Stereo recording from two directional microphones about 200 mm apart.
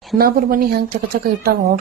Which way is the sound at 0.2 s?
45° right (ahead or behind).